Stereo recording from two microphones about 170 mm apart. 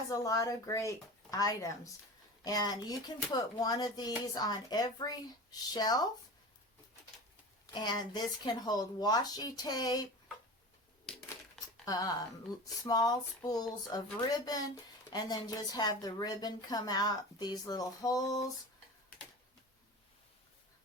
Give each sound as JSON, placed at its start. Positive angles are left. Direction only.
{"t": 0.1, "sound": "speech", "side_deg": 20}
{"t": 7.7, "sound": "speech", "side_deg": 25}
{"t": 11.9, "sound": "speech", "side_deg": 20}